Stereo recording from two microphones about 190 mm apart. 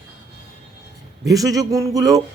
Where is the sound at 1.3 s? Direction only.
20° right (ahead or behind).